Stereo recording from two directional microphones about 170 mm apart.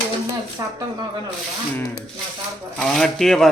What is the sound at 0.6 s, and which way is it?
Speech, 20° right (ahead or behind).